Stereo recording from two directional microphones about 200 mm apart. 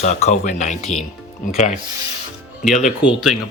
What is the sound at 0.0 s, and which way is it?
Speech, 35° left (ahead or behind).